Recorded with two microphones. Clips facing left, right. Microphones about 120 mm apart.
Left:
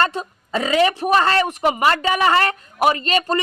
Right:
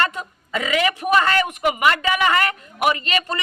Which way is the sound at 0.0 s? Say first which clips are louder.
Left 3 dB; 30° left (ahead or behind).